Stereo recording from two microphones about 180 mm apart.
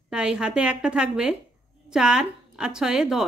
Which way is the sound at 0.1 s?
5° right (ahead or behind).